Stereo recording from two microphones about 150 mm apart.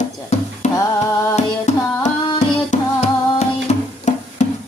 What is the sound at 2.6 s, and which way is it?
Music, 50° left (ahead or behind).